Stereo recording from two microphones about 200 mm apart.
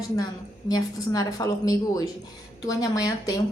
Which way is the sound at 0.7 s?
20° left (ahead or behind).